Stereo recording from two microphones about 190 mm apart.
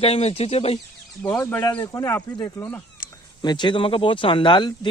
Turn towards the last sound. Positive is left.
turn(degrees=25)  # may be behind; listen again after turning